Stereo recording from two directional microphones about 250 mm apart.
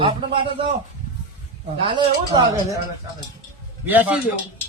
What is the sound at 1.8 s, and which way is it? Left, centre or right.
Speech, centre.